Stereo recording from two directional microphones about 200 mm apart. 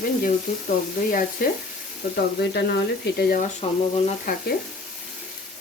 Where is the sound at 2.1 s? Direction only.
55° left (ahead or behind).